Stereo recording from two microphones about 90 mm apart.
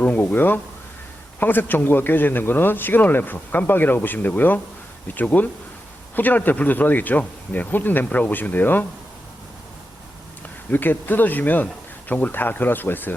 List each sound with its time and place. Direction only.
0.0 s speech: 20° left (ahead or behind)
10.7 s speech: 20° left (ahead or behind)